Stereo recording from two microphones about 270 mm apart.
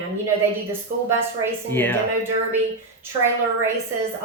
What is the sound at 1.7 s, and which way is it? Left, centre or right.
Speech, centre.